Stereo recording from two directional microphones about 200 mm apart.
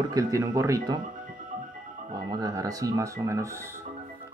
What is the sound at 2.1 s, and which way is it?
Speech, 20° right (ahead or behind).